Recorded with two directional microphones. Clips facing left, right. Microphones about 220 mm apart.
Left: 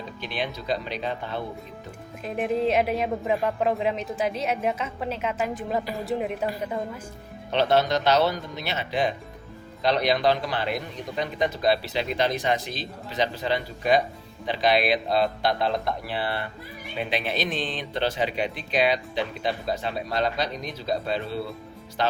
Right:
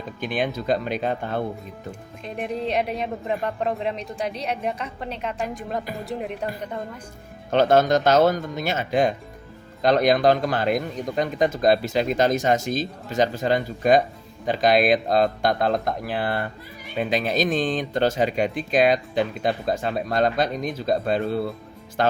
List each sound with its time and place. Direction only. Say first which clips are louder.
0.2 s speech: right 7 dB; 50° right (ahead or behind)
2.2 s a woman's voice: left 3 dB; centre (ahead or behind)
7.5 s speech: right 4 dB; 45° right (ahead or behind)